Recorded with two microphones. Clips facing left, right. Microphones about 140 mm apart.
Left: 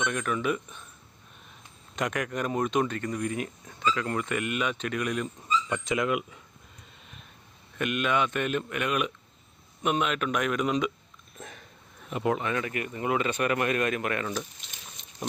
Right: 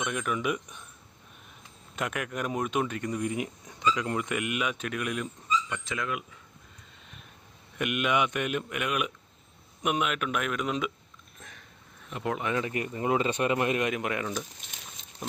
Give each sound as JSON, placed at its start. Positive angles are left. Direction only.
{"t": 0.0, "sound": "speech", "side_deg": -10}
{"t": 2.0, "sound": "speech", "side_deg": -5}
{"t": 5.7, "sound": "speech", "side_deg": 20}
{"t": 7.8, "sound": "speech", "side_deg": -15}
{"t": 12.1, "sound": "speech", "side_deg": 5}
{"t": 12.4, "sound": "speech", "side_deg": -20}